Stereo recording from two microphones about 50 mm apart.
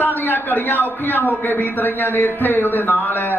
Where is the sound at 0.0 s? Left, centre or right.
Left.